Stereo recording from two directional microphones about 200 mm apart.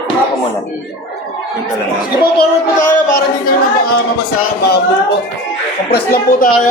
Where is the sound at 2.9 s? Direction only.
45° left (ahead or behind).